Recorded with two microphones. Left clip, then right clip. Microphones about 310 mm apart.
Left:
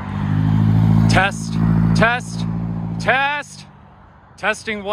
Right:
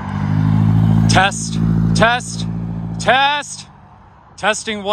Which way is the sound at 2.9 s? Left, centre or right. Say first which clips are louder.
Right 4 dB; centre.